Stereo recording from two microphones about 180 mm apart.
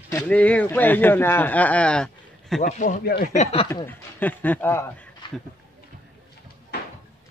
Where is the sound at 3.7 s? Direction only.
10° left (ahead or behind).